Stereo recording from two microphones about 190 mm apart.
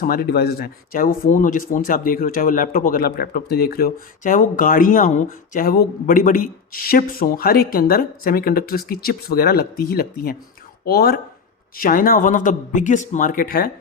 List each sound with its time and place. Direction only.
0.0 s speech: 55° left (ahead or behind)